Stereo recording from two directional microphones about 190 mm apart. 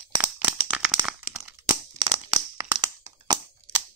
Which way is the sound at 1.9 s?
20° right (ahead or behind).